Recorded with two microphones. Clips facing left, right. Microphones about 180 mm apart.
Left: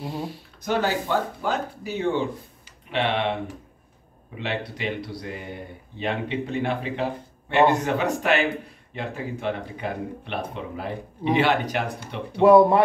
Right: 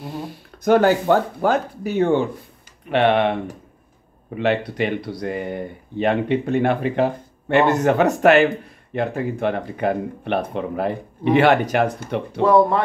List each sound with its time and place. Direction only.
0.7 s speech: 55° right (ahead or behind)
4.4 s speech: 55° right (ahead or behind)
12.4 s speech: 15° left (ahead or behind)